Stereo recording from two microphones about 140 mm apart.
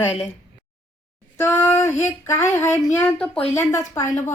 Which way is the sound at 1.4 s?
20° left (ahead or behind).